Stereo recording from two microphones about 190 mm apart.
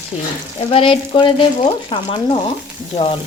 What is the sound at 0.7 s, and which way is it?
Speech, 30° left (ahead or behind).